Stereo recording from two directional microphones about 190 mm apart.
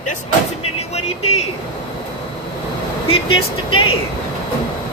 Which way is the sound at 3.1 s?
30° left (ahead or behind).